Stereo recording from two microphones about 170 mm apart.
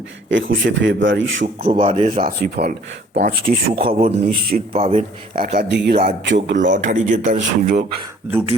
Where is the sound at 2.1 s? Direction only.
55° right (ahead or behind).